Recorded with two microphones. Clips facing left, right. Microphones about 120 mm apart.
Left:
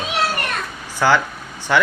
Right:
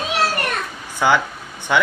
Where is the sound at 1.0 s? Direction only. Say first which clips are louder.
Left 1 dB; 15° right (ahead or behind).